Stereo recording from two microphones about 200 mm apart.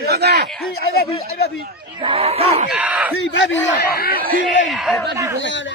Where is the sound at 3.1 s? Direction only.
65° left (ahead or behind); by 4.2 s 50° left (ahead or behind).